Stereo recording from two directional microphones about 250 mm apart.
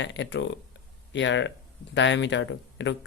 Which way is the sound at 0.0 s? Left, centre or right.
Left.